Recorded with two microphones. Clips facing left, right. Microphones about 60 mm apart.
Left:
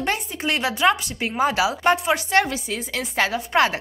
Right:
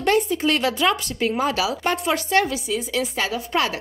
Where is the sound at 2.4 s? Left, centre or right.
Left.